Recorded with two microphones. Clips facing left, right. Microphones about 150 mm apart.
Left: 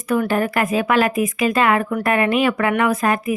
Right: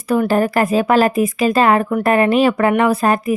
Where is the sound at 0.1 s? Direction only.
35° right (ahead or behind).